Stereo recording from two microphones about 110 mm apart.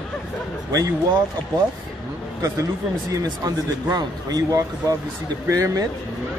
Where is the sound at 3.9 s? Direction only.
35° right (ahead or behind).